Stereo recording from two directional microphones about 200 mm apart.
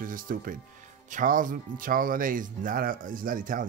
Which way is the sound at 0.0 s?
45° right (ahead or behind).